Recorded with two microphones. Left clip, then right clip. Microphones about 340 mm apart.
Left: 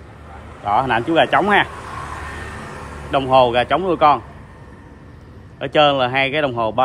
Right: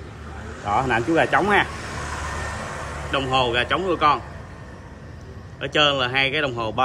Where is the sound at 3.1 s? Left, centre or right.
Centre.